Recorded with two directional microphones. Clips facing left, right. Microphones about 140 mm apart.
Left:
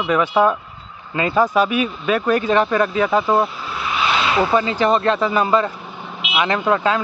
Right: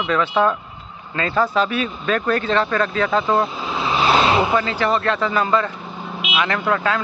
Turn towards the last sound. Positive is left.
turn(degrees=20)  # may be behind; listen again after turning